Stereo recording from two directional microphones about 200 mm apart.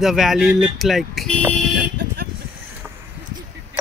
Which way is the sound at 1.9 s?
60° right (ahead or behind).